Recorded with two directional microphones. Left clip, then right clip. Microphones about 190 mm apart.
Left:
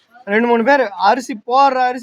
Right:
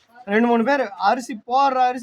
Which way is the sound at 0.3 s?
5° left (ahead or behind).